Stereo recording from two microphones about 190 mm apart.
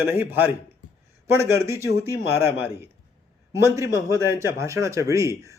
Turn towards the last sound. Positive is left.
turn(degrees=-15)  # may be behind; listen again after turning